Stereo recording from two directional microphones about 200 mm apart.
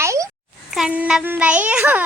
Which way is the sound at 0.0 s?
15° right (ahead or behind).